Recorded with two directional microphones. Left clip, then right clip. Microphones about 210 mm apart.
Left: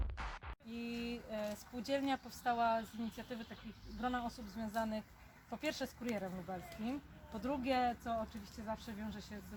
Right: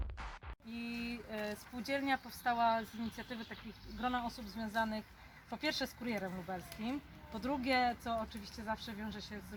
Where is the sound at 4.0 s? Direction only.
5° left (ahead or behind).